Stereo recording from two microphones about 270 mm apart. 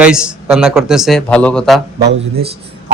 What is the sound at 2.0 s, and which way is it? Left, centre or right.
Speech, right.